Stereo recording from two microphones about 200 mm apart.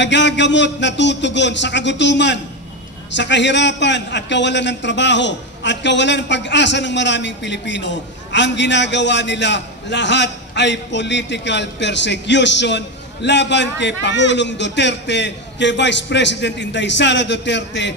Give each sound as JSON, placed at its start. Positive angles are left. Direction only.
{"t": 0.0, "sound": "a man's voice", "side_deg": 60}